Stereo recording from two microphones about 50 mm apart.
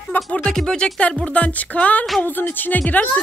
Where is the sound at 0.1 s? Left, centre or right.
Left.